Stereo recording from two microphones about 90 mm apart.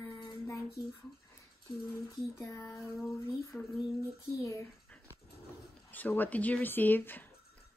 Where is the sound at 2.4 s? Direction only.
40° left (ahead or behind).